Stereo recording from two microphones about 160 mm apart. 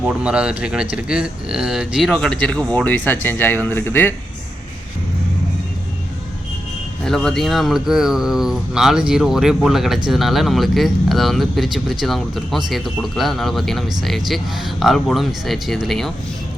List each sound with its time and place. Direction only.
0.0 s speech: 5° right (ahead or behind); by 4.1 s 15° left (ahead or behind)
7.0 s speech: 5° left (ahead or behind)